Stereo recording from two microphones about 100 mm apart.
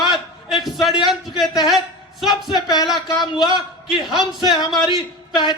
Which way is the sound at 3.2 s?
5° right (ahead or behind).